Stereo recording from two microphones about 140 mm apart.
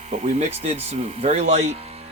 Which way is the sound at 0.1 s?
50° right (ahead or behind).